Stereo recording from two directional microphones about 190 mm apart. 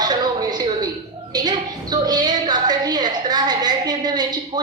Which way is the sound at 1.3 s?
20° right (ahead or behind).